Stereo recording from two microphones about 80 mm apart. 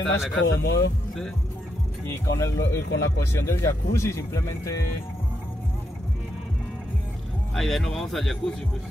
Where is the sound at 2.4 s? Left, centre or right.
Left.